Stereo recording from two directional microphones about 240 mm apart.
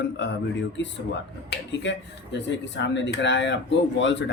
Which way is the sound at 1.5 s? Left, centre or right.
Left.